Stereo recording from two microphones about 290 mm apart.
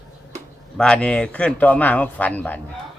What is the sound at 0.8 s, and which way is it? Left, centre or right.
A man's voice, centre.